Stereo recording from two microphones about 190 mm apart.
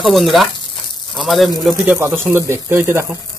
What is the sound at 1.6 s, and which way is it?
Speech, 10° right (ahead or behind).